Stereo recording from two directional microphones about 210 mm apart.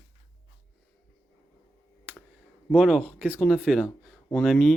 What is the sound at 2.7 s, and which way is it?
Speech, 5° right (ahead or behind).